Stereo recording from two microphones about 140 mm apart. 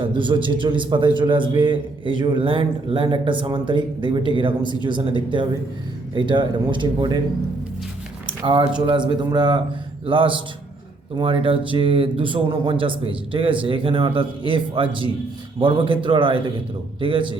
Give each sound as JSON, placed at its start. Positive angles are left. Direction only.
{"t": 0.0, "sound": "a man's voice", "side_deg": -35}
{"t": 8.4, "sound": "a man's voice", "side_deg": -35}